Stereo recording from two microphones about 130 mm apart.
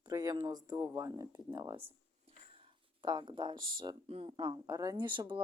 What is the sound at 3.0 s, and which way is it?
Speech, 35° right (ahead or behind).